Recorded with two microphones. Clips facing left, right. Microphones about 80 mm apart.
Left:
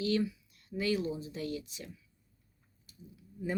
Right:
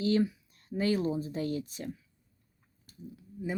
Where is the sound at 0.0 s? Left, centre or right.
Right.